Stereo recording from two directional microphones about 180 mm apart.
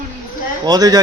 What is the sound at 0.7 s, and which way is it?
Speech, 20° right (ahead or behind).